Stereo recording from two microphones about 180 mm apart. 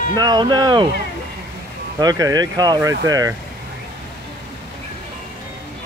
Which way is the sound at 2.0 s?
20° right (ahead or behind).